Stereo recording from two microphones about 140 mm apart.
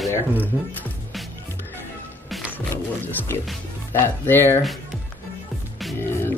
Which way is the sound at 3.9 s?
15° left (ahead or behind).